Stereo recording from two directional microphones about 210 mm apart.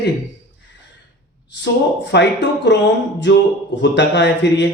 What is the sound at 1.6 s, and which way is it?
Speech, 55° left (ahead or behind).